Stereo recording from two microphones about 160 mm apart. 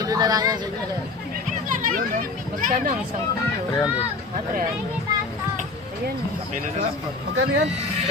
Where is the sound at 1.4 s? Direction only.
60° right (ahead or behind).